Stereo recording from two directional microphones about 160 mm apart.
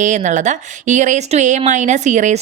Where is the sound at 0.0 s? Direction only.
50° right (ahead or behind).